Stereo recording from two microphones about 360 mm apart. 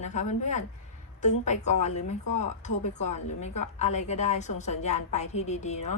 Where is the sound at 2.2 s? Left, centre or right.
Left.